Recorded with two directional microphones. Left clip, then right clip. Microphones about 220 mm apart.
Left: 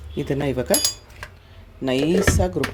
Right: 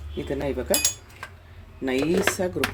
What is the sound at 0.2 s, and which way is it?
Speech, 30° left (ahead or behind).